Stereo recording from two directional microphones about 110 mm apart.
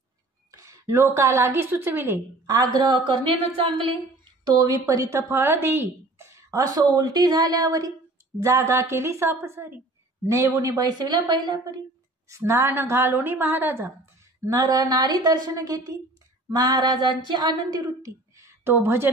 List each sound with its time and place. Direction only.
0.5 s a woman's voice: 25° right (ahead or behind); by 4.0 s 55° right (ahead or behind)
4.5 s a woman's voice: 35° right (ahead or behind)
12.3 s a woman's voice: 25° right (ahead or behind)
14.6 s speech: 35° right (ahead or behind); by 19.0 s 20° right (ahead or behind)